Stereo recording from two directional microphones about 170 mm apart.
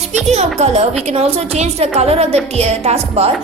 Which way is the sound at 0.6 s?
40° right (ahead or behind).